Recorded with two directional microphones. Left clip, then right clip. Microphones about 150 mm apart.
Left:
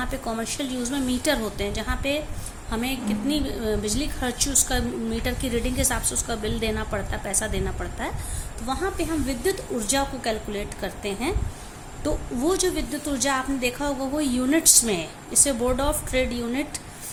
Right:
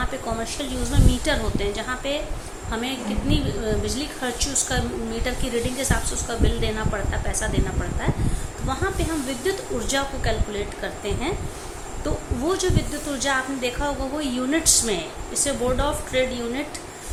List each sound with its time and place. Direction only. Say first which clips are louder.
0.0 s a woman's voice: right 2 dB; 50° left (ahead or behind)
9.4 s a woman's voice: right 1 dB; 45° left (ahead or behind)